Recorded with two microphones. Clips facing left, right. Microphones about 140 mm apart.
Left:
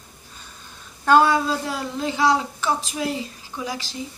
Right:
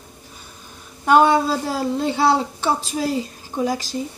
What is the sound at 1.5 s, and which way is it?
A woman's voice, 35° right (ahead or behind).